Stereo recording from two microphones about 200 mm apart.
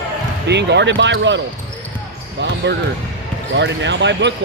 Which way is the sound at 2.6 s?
60° right (ahead or behind).